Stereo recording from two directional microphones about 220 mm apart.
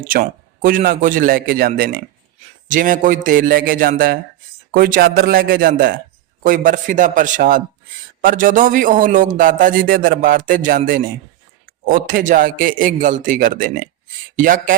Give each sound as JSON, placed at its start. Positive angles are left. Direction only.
{"t": 0.1, "sound": "a man's voice", "side_deg": -40}